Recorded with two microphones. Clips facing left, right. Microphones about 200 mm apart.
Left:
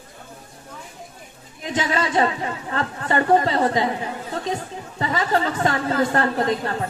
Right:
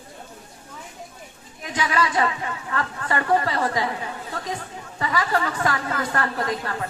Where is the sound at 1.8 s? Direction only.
25° left (ahead or behind).